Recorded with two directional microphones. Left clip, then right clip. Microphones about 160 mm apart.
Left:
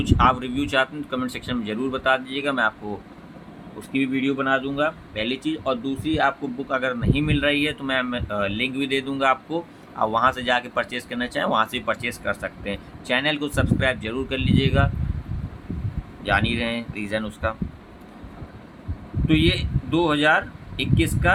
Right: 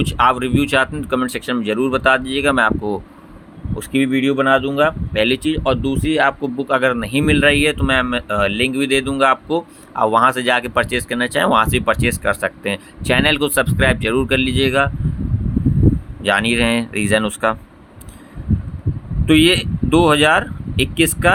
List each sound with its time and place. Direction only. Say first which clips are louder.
0.0 s speech: right 4 dB; 60° right (ahead or behind)
3.8 s speech: right 7 dB; 65° right (ahead or behind)
16.2 s speech: right 7 dB; 70° right (ahead or behind)
19.3 s speech: right 8 dB; 75° right (ahead or behind)